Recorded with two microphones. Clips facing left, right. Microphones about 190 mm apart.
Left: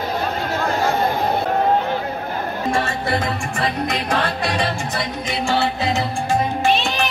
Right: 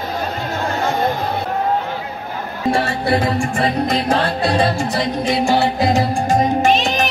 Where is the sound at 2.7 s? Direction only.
35° right (ahead or behind).